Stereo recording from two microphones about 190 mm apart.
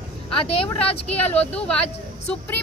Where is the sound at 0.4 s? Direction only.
30° left (ahead or behind).